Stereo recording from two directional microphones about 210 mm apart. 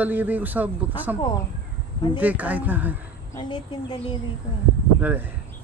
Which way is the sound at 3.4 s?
20° left (ahead or behind).